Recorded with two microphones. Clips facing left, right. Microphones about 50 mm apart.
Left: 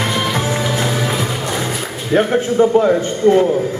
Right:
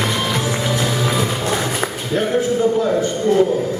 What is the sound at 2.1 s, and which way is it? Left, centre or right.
A man's voice, left.